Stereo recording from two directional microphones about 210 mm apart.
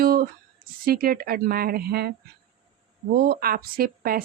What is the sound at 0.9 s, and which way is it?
Speech, 45° right (ahead or behind).